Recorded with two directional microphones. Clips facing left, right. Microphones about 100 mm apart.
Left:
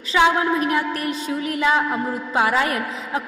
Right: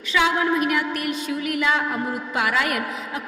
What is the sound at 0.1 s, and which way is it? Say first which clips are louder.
A woman's voice: left 3 dB; 35° left (ahead or behind).